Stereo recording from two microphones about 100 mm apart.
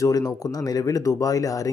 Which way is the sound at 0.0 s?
40° left (ahead or behind).